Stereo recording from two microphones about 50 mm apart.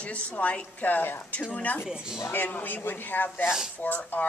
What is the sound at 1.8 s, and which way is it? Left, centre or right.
Speech, centre.